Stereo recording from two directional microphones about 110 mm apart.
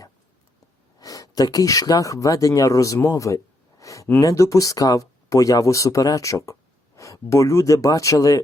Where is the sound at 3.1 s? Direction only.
30° left (ahead or behind).